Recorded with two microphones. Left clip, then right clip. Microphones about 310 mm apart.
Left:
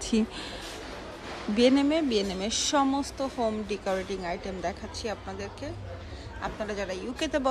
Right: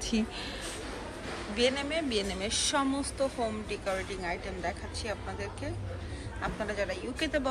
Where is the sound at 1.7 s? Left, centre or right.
Centre.